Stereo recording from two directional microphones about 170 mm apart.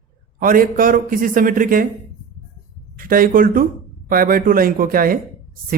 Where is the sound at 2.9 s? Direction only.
55° right (ahead or behind).